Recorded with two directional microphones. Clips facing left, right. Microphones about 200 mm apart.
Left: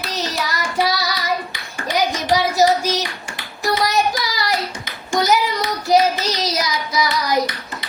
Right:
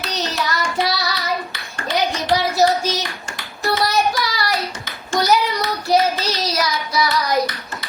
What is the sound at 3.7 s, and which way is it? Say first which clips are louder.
Child singing: even; 20° left (ahead or behind).